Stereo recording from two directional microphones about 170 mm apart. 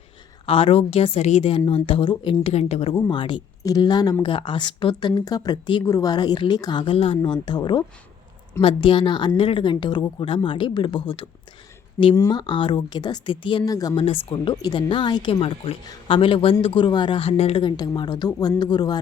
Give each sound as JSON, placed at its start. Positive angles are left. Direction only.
{"t": 0.4, "sound": "a woman's voice", "side_deg": 35}
{"t": 2.9, "sound": "speech", "side_deg": 25}